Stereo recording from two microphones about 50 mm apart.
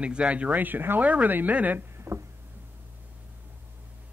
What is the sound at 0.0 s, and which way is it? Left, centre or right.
Speech, right.